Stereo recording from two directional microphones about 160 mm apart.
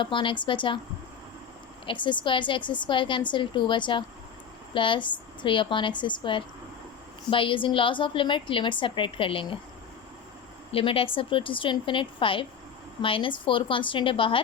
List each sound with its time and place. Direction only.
0.0 s a woman's voice: 30° left (ahead or behind)
1.9 s a woman's voice: 30° left (ahead or behind)
10.7 s a woman's voice: 35° left (ahead or behind)